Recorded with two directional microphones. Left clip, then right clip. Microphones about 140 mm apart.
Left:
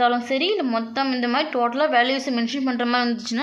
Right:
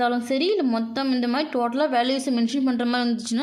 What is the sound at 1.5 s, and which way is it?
Speech, 55° right (ahead or behind).